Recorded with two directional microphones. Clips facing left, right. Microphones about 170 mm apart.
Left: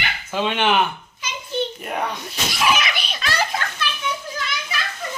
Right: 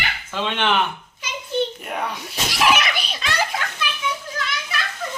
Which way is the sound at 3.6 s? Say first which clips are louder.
Left 1 dB; 10° right (ahead or behind).